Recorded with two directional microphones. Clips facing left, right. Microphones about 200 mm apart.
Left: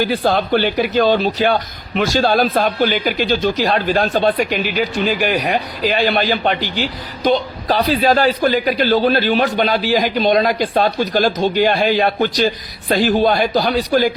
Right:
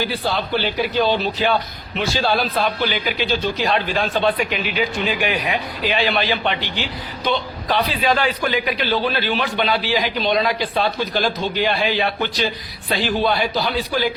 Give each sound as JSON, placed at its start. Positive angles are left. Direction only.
{"t": 0.0, "sound": "a man's voice", "side_deg": 50}